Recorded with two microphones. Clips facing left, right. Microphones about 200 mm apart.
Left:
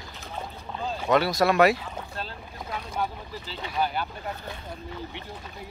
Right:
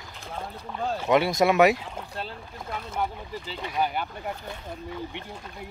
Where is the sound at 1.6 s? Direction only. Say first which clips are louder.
Right 1 dB; 10° right (ahead or behind).